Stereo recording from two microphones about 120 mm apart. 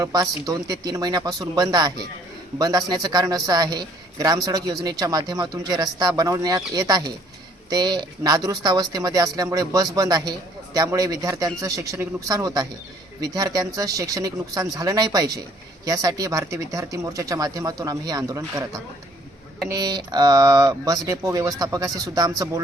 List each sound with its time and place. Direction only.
0.0 s a man's voice: 30° right (ahead or behind)